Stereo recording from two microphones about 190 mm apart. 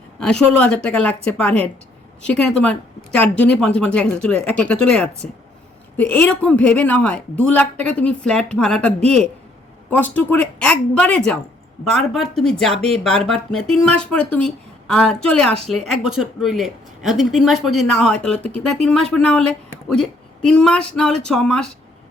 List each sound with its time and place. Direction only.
0.2 s a woman's voice: 5° left (ahead or behind)